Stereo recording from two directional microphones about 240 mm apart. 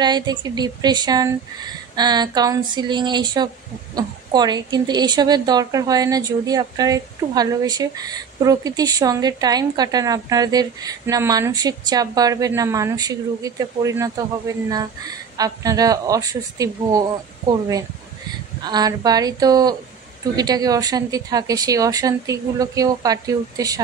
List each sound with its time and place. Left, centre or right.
0.0 s a woman's voice: centre